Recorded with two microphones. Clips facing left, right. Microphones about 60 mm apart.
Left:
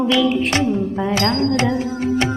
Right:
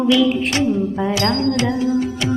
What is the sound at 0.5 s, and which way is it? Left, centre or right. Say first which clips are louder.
Speech: right 1 dB; left.